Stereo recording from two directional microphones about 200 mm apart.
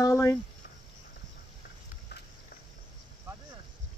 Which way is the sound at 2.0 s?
50° left (ahead or behind).